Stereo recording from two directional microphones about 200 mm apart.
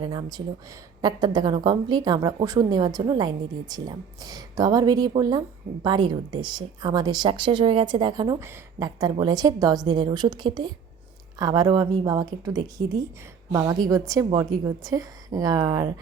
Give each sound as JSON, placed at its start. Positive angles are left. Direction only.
{"t": 0.0, "sound": "a woman's voice", "side_deg": -20}